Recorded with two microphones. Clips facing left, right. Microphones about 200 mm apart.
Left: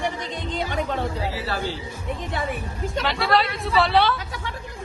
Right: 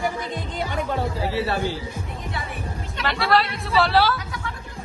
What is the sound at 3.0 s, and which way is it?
A woman's voice, centre (ahead or behind).